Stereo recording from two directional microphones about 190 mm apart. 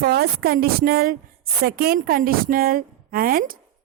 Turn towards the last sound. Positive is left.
turn(degrees=-50)  # may be behind; listen again after turning